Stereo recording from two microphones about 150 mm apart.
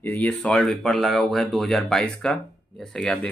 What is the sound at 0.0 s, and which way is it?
Speech, 10° left (ahead or behind).